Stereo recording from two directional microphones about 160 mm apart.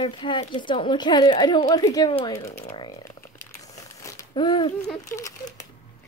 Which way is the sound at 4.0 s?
20° left (ahead or behind).